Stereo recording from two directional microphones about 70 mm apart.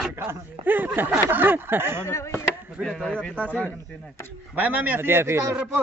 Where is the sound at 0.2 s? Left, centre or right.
Right.